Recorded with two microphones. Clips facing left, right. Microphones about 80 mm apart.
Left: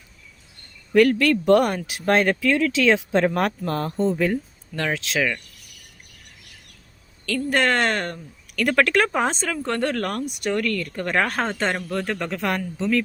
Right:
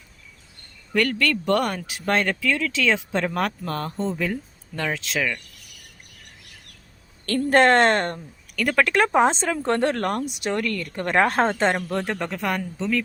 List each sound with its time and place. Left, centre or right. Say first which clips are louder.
0.9 s speech: left 6 dB; centre
7.3 s a woman's voice: right 4 dB; right
7.6 s speech: right 5 dB; right
8.5 s speech: left 1 dB; centre
12.3 s speech: left 1 dB; centre